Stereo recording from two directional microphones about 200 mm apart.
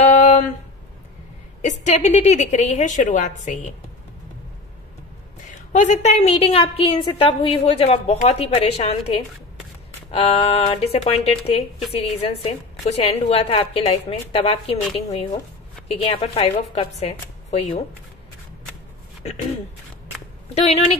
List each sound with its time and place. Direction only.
0.0 s a sound: 35° left (ahead or behind)
1.6 s a woman's voice: 35° left (ahead or behind)
5.7 s a woman's voice: 35° left (ahead or behind)
15.9 s a woman's voice: 30° left (ahead or behind)
20.5 s a woman's voice: 30° left (ahead or behind)